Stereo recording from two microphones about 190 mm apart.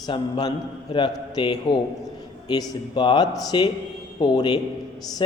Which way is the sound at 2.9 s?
25° left (ahead or behind).